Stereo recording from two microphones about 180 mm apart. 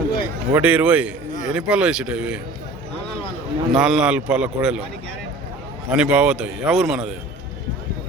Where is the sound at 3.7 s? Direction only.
5° right (ahead or behind).